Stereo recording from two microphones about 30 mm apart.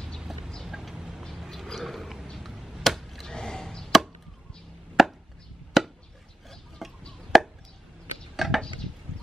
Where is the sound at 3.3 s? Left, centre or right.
Left.